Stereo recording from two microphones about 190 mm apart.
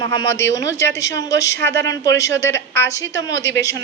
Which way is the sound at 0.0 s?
20° left (ahead or behind).